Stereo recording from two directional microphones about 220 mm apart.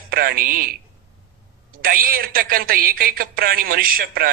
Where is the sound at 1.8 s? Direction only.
40° right (ahead or behind).